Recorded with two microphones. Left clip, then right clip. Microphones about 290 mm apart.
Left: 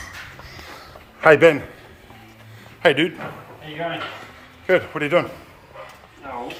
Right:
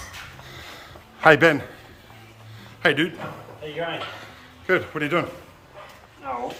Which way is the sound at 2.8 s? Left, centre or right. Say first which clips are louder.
Left 4 dB; centre.